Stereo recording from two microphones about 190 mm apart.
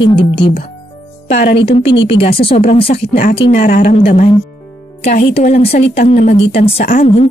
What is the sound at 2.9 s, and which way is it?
Speech, 50° left (ahead or behind).